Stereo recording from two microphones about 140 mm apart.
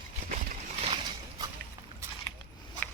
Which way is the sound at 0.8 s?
40° right (ahead or behind).